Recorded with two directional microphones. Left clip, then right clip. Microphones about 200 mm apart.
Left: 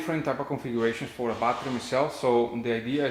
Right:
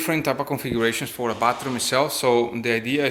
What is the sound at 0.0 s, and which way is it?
A man's voice, 35° right (ahead or behind).